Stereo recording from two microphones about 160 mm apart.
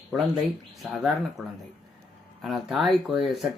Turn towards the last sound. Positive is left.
turn(degrees=0)  # may be behind; listen again after turning